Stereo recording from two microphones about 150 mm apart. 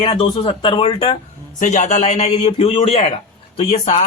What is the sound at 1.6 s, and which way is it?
Speech, 50° left (ahead or behind).